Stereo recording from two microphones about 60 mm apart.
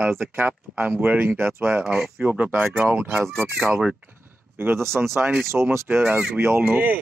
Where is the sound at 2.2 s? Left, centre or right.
Right.